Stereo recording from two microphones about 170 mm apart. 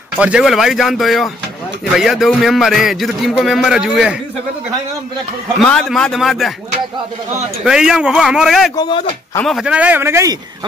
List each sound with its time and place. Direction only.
0.2 s a man's voice: 5° right (ahead or behind)
5.6 s a man's voice: centre (ahead or behind)
7.6 s a man's voice: 5° right (ahead or behind)
8.7 s speech: 30° left (ahead or behind)
9.5 s a man's voice: 5° right (ahead or behind)